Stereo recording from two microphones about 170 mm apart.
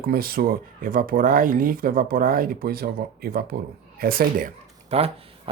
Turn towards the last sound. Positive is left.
turn(degrees=-35)  # may be behind; listen again after turning